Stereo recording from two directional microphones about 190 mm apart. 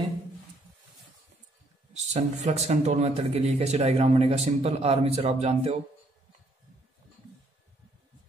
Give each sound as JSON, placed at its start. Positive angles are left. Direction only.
{"t": 2.1, "sound": "a man's voice", "side_deg": -35}